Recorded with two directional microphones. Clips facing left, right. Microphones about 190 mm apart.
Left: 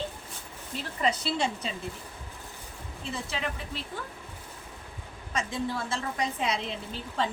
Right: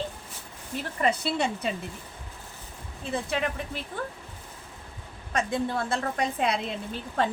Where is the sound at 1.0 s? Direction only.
55° right (ahead or behind).